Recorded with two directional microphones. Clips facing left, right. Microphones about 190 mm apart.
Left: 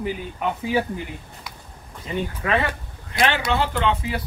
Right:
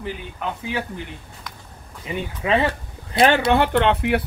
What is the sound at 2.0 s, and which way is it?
Speech, 25° right (ahead or behind).